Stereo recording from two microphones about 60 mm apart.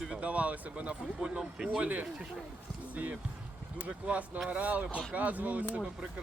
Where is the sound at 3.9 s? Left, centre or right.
Right.